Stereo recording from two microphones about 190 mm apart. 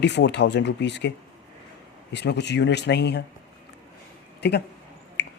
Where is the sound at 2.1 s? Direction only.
65° left (ahead or behind).